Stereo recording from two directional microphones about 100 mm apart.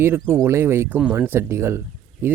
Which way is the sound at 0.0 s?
25° right (ahead or behind).